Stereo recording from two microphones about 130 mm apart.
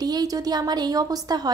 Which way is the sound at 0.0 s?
30° right (ahead or behind).